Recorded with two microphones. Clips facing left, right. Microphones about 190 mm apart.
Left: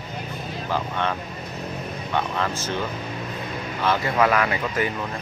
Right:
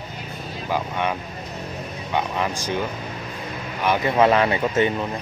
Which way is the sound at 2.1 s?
15° right (ahead or behind).